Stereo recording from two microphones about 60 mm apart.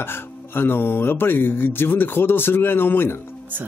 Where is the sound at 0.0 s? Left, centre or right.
Left.